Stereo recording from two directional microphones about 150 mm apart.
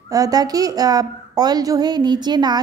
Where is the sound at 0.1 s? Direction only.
25° right (ahead or behind).